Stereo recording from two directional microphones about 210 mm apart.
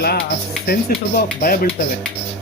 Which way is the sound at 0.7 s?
45° left (ahead or behind).